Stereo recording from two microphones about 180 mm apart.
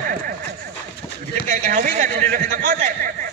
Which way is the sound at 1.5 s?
45° right (ahead or behind).